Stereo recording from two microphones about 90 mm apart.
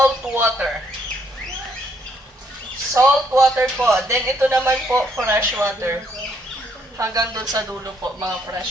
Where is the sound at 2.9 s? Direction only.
30° right (ahead or behind); by 8.6 s 45° right (ahead or behind).